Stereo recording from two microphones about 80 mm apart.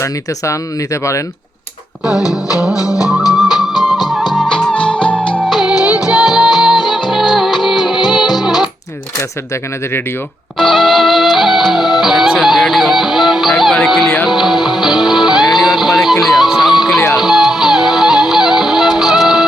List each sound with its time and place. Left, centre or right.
0.0 s speech: left
3.3 s music: centre
5.5 s music: centre
10.6 s music: centre